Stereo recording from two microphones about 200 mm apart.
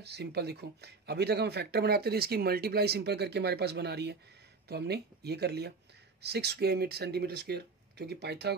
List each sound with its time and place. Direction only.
0.0 s speech: 55° right (ahead or behind)